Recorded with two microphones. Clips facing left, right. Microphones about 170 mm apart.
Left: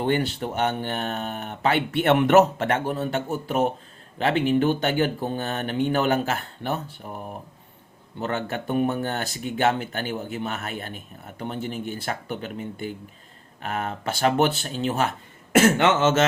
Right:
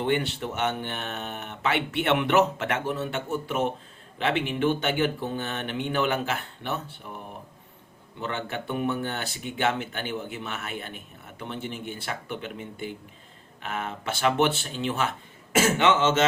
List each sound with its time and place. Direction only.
0.0 s speech: 35° left (ahead or behind)
8.2 s speech: 45° left (ahead or behind)
15.5 s speech: 55° left (ahead or behind)